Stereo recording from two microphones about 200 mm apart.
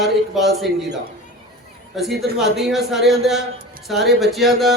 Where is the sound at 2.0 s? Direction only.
Centre (ahead or behind).